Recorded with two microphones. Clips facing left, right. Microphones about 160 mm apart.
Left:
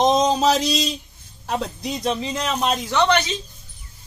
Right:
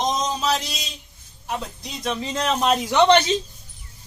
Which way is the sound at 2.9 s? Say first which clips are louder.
Right 4 dB; 25° right (ahead or behind).